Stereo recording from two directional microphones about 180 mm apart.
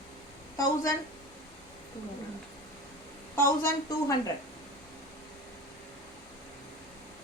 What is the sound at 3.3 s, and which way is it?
Speech, 15° left (ahead or behind).